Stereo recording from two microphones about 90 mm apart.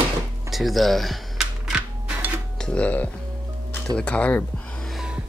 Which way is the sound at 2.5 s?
10° left (ahead or behind).